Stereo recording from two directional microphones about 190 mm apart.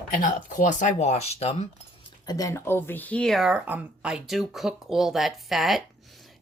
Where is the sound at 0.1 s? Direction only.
45° left (ahead or behind).